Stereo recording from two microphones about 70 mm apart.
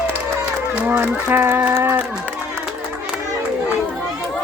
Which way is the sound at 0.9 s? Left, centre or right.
Right.